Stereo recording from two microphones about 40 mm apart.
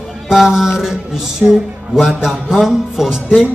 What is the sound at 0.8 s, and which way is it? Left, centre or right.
Music, centre.